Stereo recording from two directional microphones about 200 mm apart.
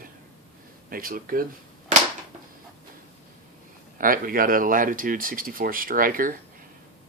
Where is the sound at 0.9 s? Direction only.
45° right (ahead or behind).